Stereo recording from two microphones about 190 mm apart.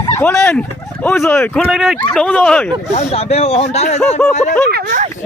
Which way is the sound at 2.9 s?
35° left (ahead or behind).